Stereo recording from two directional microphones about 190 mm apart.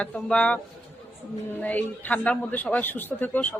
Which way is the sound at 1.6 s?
10° left (ahead or behind).